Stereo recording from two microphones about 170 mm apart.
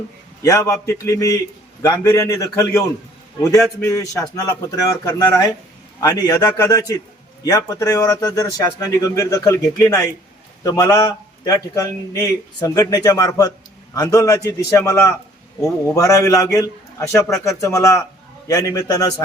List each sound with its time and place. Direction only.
0.4 s a man's voice: 20° left (ahead or behind)